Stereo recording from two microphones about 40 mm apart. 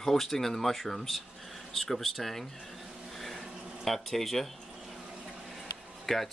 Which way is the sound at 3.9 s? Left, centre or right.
Centre.